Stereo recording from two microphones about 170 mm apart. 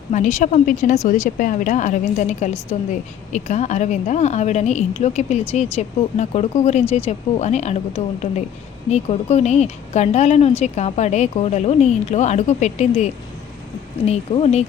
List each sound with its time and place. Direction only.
0.1 s a woman's voice: 45° left (ahead or behind)